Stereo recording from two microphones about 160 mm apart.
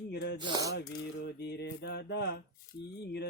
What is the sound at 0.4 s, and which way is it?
Speech, 25° right (ahead or behind).